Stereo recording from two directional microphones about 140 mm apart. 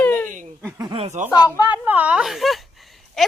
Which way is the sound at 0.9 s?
55° right (ahead or behind).